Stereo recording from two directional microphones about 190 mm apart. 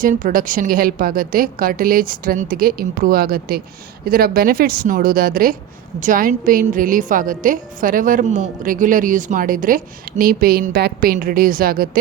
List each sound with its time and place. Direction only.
0.0 s a woman's voice: 45° right (ahead or behind)